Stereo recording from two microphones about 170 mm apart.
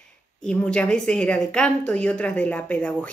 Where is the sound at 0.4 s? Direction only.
5° left (ahead or behind).